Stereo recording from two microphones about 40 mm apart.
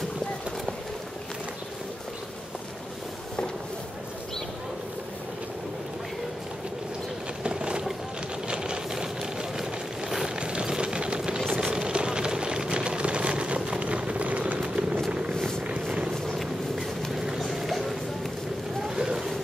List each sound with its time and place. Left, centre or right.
7.4 s a sound: right
10.2 s vehicle: right
15.3 s vehicle: centre
15.6 s vehicle: right
16.3 s vehicle: centre
18.9 s vehicle: centre